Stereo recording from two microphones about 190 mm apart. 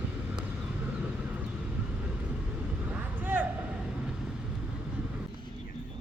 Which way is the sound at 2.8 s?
10° right (ahead or behind).